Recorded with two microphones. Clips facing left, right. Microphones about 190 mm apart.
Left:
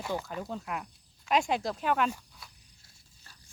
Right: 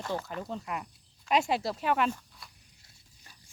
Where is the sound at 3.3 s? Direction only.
15° right (ahead or behind).